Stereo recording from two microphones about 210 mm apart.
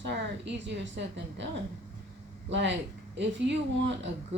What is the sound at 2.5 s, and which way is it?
A woman's voice, 60° right (ahead or behind).